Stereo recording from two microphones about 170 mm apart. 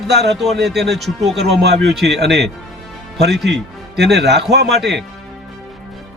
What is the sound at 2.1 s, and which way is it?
Speech, 90° right.